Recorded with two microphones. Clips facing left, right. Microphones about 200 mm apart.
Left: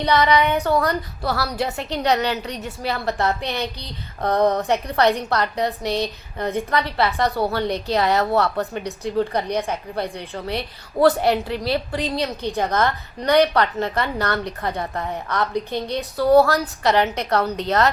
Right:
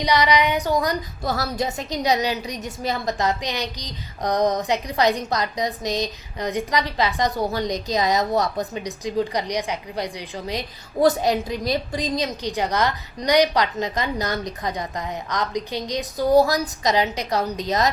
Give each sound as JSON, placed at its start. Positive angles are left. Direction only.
{"t": 0.0, "sound": "a woman's voice", "side_deg": -15}